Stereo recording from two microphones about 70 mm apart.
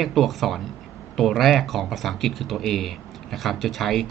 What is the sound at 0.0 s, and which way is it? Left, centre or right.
Speech, centre.